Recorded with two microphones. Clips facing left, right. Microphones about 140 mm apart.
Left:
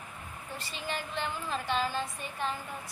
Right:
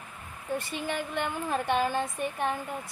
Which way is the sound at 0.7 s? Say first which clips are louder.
Right 5 dB; 55° right (ahead or behind).